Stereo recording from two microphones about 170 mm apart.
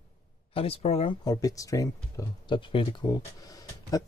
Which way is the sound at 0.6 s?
35° left (ahead or behind).